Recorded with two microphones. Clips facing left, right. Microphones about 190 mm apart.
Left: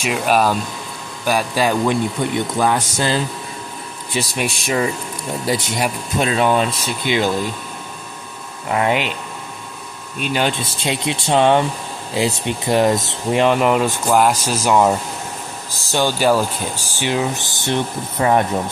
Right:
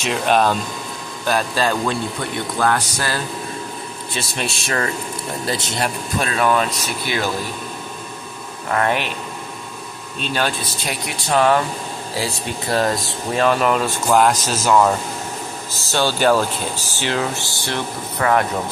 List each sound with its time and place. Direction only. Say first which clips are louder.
0.0 s speech: even; 5° left (ahead or behind); by 7.2 s 25° left (ahead or behind)
8.6 s speech: left 2 dB; 15° left (ahead or behind)
10.1 s speech: left 3 dB; 15° left (ahead or behind)
10.6 s speech: left 4 dB; 25° left (ahead or behind)
15.9 s speech: left 1 dB; 15° left (ahead or behind)